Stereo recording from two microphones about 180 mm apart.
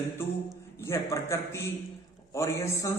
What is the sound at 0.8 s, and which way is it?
A man's voice, 15° left (ahead or behind).